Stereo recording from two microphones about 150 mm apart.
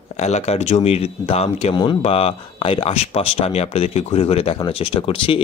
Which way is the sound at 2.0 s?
40° left (ahead or behind).